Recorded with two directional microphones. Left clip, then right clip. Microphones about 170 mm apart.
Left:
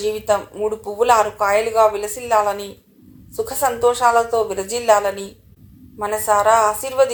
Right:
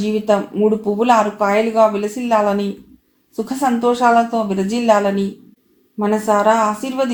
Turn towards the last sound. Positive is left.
turn(degrees=40)  # may be behind; listen again after turning